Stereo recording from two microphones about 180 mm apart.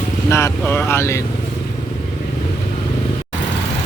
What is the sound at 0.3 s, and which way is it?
Speech, 15° left (ahead or behind).